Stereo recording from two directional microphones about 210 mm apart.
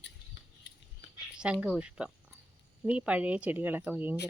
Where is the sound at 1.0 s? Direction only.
60° left (ahead or behind).